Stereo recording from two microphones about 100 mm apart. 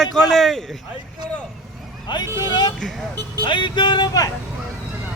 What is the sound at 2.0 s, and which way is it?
Speech, 45° left (ahead or behind).